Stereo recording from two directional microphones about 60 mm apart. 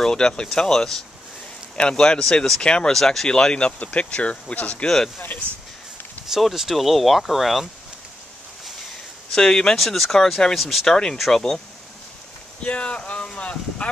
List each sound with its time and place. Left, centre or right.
0.0 s speech: centre
4.8 s speech: centre
6.2 s speech: centre
9.3 s speech: centre
12.6 s a sound: centre